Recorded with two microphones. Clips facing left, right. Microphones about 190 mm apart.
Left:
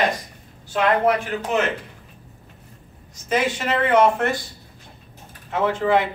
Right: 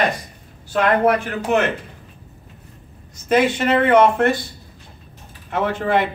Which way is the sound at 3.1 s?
60° right (ahead or behind).